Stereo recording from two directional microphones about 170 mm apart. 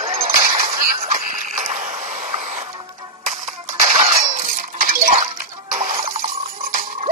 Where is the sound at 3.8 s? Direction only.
45° right (ahead or behind).